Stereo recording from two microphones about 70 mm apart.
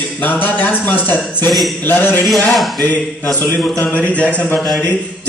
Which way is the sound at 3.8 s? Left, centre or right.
Centre.